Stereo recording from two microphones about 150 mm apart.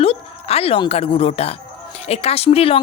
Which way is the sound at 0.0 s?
40° left (ahead or behind).